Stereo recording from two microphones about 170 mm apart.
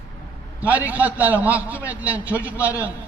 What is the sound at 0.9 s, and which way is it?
Speech, 10° right (ahead or behind).